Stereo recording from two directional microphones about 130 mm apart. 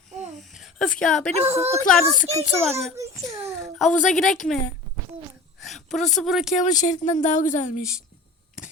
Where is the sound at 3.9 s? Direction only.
75° left (ahead or behind).